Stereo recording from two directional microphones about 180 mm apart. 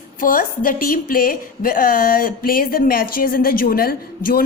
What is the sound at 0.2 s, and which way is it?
A woman's voice, 50° left (ahead or behind).